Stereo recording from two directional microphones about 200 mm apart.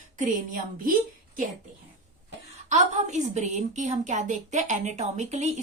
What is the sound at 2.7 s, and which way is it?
A woman's voice, 35° right (ahead or behind).